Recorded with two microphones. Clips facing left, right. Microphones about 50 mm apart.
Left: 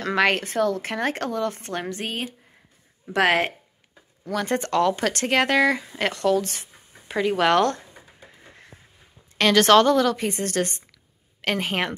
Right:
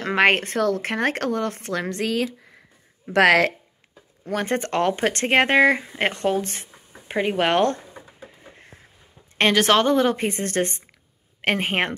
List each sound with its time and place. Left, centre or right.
0.0 s speech: right
0.6 s speech: right
3.1 s speech: right
4.2 s speech: right
9.5 s a woman's voice: centre
10.0 s speech: right